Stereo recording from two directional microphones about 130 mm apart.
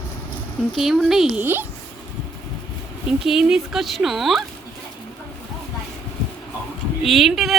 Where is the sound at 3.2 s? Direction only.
5° right (ahead or behind).